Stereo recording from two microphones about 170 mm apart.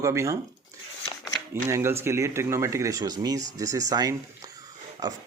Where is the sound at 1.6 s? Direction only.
15° right (ahead or behind).